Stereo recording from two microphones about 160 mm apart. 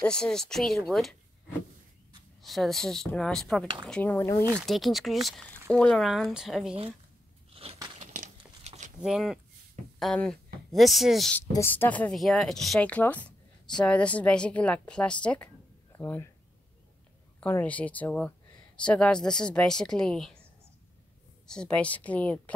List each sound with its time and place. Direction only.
0.0 s speech: 5° left (ahead or behind)
2.4 s speech: centre (ahead or behind)
3.6 s speech: 30° right (ahead or behind)
3.9 s speech: 10° left (ahead or behind)
4.6 s speech: centre (ahead or behind)
7.5 s biting: 35° right (ahead or behind)
8.0 s a sound: 50° right (ahead or behind)
9.0 s speech: 5° right (ahead or behind)
11.5 s speech: 15° left (ahead or behind)
17.4 s speech: 10° left (ahead or behind)
21.5 s speech: 5° left (ahead or behind)